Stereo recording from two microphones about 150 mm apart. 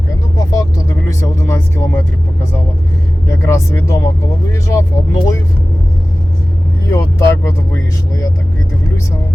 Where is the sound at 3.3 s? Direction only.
20° left (ahead or behind).